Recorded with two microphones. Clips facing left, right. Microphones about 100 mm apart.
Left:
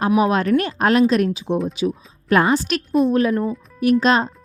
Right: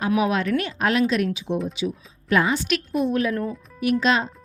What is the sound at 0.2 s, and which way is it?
Speech, 40° left (ahead or behind).